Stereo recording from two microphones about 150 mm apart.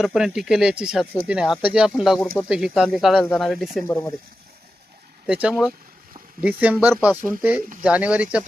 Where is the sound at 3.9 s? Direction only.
20° left (ahead or behind).